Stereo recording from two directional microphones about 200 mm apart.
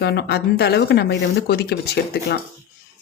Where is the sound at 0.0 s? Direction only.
55° left (ahead or behind).